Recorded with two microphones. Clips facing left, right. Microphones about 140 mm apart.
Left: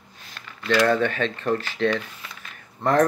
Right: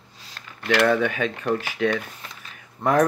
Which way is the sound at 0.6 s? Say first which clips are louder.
Even; 60° right (ahead or behind).